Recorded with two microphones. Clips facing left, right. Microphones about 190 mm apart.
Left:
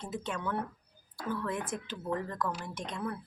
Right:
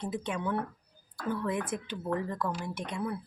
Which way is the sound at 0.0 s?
15° right (ahead or behind).